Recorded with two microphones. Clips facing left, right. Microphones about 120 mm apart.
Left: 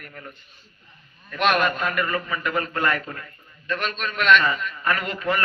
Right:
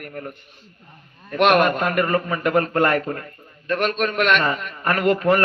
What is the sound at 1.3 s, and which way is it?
A man's voice, 50° right (ahead or behind).